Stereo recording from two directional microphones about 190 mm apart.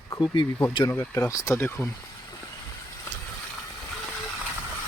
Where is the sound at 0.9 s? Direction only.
15° left (ahead or behind).